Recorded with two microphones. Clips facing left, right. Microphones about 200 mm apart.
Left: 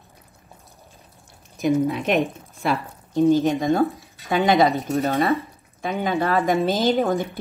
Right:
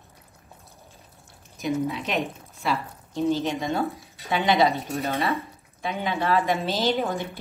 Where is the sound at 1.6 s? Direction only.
50° left (ahead or behind).